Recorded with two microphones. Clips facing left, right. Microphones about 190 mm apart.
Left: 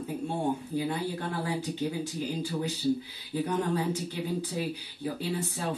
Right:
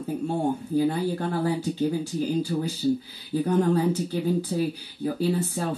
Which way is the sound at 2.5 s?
50° right (ahead or behind).